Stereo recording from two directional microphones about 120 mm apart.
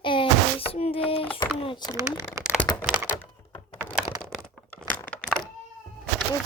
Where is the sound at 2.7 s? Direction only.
25° left (ahead or behind).